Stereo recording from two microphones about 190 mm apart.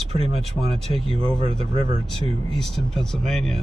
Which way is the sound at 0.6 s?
Centre (ahead or behind).